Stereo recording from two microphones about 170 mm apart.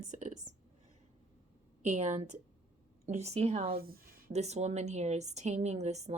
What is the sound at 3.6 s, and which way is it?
Speech, 60° right (ahead or behind).